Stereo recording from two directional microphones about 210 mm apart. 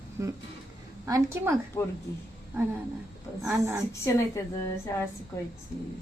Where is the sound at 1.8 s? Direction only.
15° left (ahead or behind).